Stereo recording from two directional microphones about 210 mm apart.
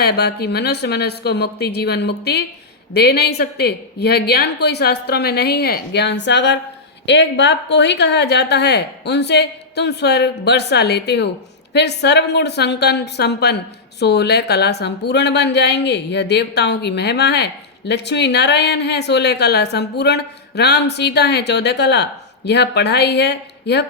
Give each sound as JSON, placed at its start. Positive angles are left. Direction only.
{"t": 0.0, "sound": "a woman's voice", "side_deg": 50}